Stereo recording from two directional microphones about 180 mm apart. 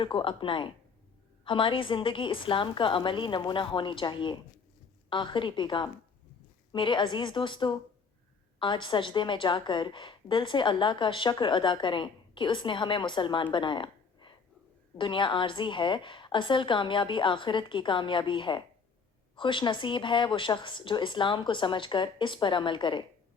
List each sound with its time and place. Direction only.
0.0 s a woman's voice: 30° left (ahead or behind)